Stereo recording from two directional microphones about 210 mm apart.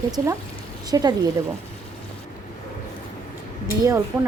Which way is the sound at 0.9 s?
20° right (ahead or behind).